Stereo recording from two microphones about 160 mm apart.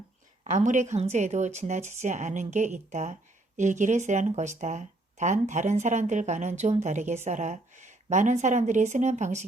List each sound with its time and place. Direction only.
0.5 s speech: 50° right (ahead or behind)